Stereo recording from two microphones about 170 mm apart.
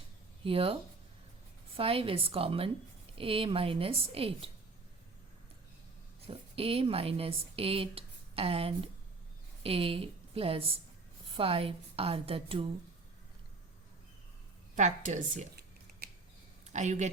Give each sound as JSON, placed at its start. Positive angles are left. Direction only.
{"t": 0.4, "sound": "a woman's voice", "side_deg": -35}
{"t": 6.2, "sound": "a woman's voice", "side_deg": -35}
{"t": 14.8, "sound": "a woman's voice", "side_deg": -45}
{"t": 16.0, "sound": "a sound", "side_deg": -65}
{"t": 16.6, "sound": "speech", "side_deg": -45}